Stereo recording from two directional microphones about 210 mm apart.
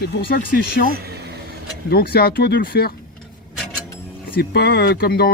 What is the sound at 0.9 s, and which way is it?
Vehicle, 50° right (ahead or behind).